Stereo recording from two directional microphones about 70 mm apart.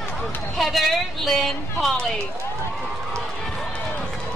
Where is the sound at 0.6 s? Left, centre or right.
Centre.